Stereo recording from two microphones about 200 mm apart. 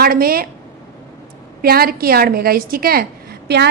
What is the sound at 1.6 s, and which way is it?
A woman's voice, 50° right (ahead or behind).